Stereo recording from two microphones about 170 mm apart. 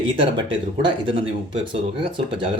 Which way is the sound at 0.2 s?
30° right (ahead or behind).